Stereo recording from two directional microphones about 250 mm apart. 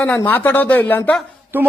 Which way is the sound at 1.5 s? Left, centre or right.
Centre.